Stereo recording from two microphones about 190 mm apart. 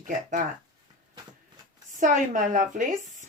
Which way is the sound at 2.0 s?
45° right (ahead or behind).